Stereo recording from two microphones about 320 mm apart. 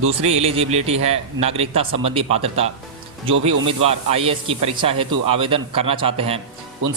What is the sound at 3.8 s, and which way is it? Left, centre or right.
A man's voice, centre.